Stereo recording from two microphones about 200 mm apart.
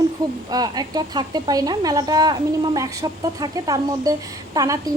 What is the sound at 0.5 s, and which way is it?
A woman's voice, 20° right (ahead or behind).